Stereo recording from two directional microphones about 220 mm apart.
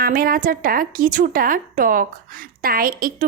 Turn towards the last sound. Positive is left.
turn(degrees=-40)  # may be behind; listen again after turning